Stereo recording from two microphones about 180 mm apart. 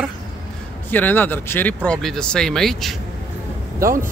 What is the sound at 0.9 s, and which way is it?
Speech, 10° left (ahead or behind).